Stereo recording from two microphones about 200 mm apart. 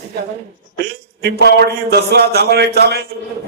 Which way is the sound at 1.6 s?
55° right (ahead or behind).